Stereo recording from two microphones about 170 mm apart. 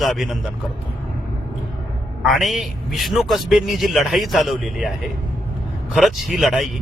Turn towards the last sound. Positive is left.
turn(degrees=0)  # may be behind; listen again after turning